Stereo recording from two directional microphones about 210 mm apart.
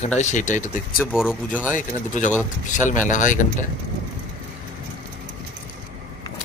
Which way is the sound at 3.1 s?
35° left (ahead or behind).